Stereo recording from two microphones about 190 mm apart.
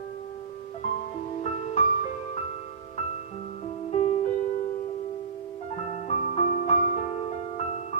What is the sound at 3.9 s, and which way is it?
Music, 35° left (ahead or behind).